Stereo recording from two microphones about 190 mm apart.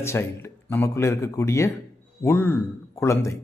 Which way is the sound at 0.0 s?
10° left (ahead or behind).